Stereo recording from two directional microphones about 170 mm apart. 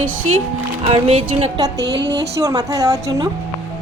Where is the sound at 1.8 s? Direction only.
85° right.